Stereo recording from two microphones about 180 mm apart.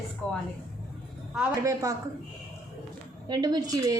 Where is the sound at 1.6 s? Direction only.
20° right (ahead or behind).